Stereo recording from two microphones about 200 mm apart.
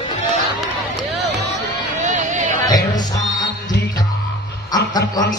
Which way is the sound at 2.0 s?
40° right (ahead or behind).